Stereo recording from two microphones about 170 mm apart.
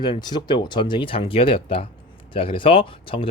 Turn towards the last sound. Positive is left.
turn(degrees=30)  # may be behind; listen again after turning